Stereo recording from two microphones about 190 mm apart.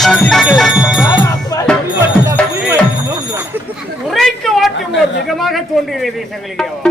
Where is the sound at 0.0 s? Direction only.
Centre (ahead or behind).